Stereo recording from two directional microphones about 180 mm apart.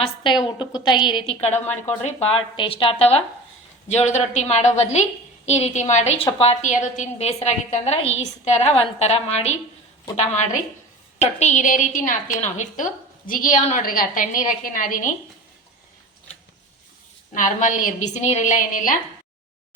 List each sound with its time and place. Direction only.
0.0 s a woman's voice: 25° left (ahead or behind)
11.2 s a woman's voice: 40° left (ahead or behind)
17.3 s a woman's voice: 45° left (ahead or behind)